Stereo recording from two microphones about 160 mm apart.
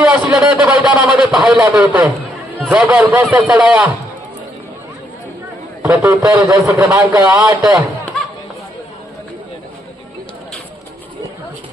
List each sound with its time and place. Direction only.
0.1 s a man's voice: 10° right (ahead or behind)
5.9 s a man's voice: 20° right (ahead or behind)